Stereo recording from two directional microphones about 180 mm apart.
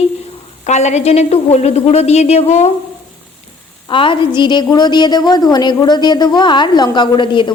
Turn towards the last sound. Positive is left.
turn(degrees=25)  # may be behind; listen again after turning